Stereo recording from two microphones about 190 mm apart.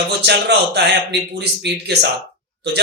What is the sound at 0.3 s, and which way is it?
Speech, 65° right (ahead or behind).